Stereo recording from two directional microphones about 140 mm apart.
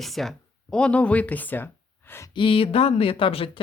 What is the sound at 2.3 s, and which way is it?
Speech, 40° left (ahead or behind).